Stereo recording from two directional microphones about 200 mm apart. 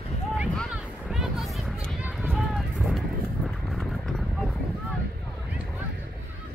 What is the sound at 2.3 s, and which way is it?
Run, centre (ahead or behind).